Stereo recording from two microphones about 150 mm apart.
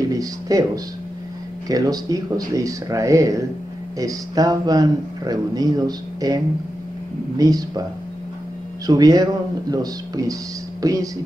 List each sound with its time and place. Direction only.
0.1 s a man's voice: 25° right (ahead or behind)
1.7 s a man's voice: 25° right (ahead or behind)
8.8 s a man's voice: 25° right (ahead or behind)